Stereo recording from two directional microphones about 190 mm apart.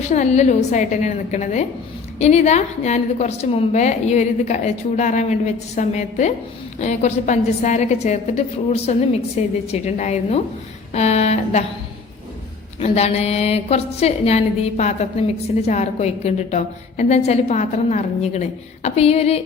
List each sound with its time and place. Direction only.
0.1 s a woman's voice: 40° left (ahead or behind)
12.8 s a woman's voice: 35° left (ahead or behind)